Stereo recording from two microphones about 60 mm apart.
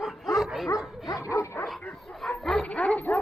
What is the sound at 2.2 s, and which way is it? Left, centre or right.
Bow-wow, centre.